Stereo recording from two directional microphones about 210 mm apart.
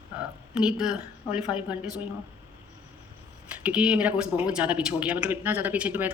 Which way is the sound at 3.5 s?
5° right (ahead or behind).